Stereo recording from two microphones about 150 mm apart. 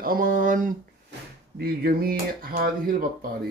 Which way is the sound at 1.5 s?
90° right.